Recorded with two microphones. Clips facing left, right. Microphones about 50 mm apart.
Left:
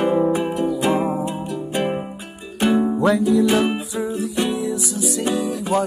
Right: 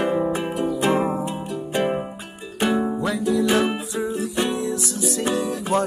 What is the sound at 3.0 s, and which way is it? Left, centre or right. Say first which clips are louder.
Music: left 6 dB; left.